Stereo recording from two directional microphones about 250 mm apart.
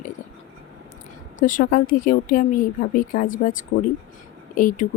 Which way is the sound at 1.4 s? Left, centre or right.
Left.